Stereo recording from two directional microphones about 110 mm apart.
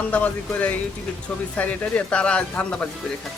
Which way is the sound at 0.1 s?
15° left (ahead or behind).